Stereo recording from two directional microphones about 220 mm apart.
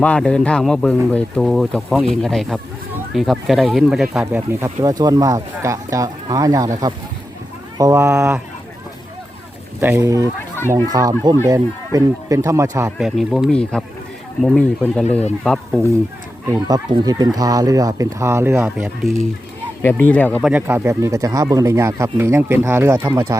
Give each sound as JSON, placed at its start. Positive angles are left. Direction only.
{"t": 0.0, "sound": "speech", "side_deg": 5}
{"t": 9.8, "sound": "speech", "side_deg": -10}
{"t": 13.0, "sound": "speech", "side_deg": 0}
{"t": 16.5, "sound": "speech", "side_deg": -15}
{"t": 19.8, "sound": "speech", "side_deg": 10}
{"t": 20.5, "sound": "speech", "side_deg": -10}